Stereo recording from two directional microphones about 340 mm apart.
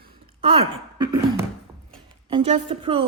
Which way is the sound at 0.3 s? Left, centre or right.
Centre.